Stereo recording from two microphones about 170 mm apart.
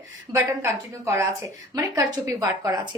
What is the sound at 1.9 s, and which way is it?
Speech, 20° right (ahead or behind).